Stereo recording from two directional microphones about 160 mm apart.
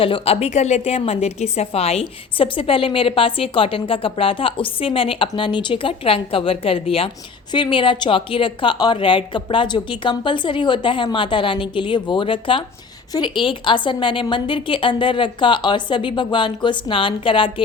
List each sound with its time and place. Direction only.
0.0 s a woman's voice: 35° left (ahead or behind)